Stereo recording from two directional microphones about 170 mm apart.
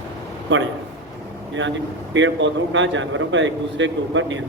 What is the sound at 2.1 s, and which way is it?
Speech, 90° right.